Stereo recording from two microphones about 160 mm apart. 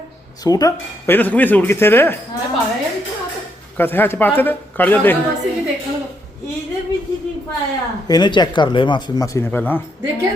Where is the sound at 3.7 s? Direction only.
10° left (ahead or behind).